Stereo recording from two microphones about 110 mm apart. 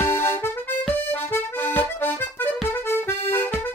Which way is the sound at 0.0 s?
20° left (ahead or behind).